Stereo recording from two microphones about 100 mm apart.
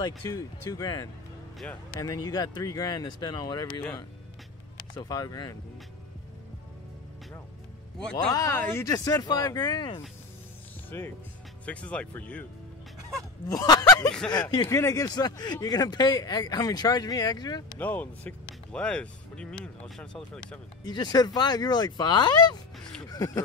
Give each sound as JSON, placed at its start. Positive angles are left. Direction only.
{"t": 0.0, "sound": "speech", "side_deg": 35}
{"t": 4.7, "sound": "speech", "side_deg": 45}
{"t": 8.3, "sound": "speech", "side_deg": 35}
{"t": 8.5, "sound": "speech", "side_deg": 20}
{"t": 8.8, "sound": "speech", "side_deg": 40}
{"t": 10.9, "sound": "speech", "side_deg": 20}
{"t": 13.5, "sound": "speech", "side_deg": 40}
{"t": 14.7, "sound": "speech", "side_deg": 30}
{"t": 15.0, "sound": "speech", "side_deg": 40}
{"t": 17.7, "sound": "speech", "side_deg": 15}
{"t": 20.8, "sound": "speech", "side_deg": 45}